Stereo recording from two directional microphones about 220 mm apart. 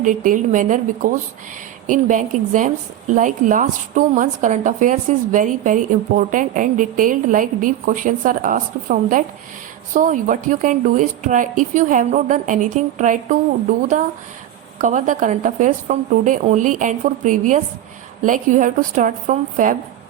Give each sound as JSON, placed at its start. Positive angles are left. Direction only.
{"t": 0.0, "sound": "a woman's voice", "side_deg": -35}